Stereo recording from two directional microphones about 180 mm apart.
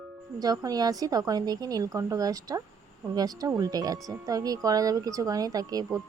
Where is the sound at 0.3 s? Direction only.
20° right (ahead or behind).